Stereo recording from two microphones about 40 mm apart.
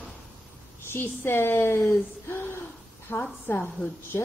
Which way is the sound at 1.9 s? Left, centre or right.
Left.